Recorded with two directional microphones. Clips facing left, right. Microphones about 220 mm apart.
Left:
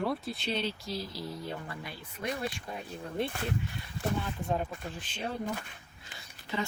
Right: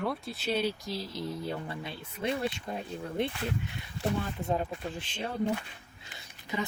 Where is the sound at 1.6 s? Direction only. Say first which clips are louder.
Right 3 dB; 25° right (ahead or behind).